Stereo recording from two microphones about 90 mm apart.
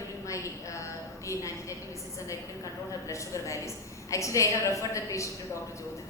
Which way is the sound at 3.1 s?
35° left (ahead or behind).